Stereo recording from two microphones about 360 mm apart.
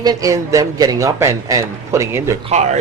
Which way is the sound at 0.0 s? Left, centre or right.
Centre.